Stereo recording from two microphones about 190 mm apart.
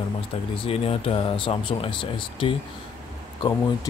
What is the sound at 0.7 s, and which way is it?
Speech, 30° left (ahead or behind).